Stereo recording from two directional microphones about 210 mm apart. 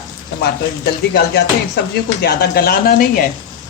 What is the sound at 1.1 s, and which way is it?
Music, 55° left (ahead or behind).